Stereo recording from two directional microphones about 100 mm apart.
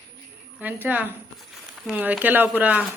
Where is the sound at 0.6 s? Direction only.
15° right (ahead or behind).